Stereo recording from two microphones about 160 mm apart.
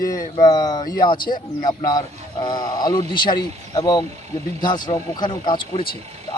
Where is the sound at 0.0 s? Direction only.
60° left (ahead or behind).